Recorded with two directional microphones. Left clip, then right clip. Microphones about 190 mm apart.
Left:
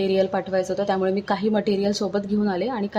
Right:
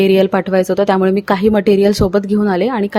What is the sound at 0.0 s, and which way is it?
A woman's voice, 40° right (ahead or behind).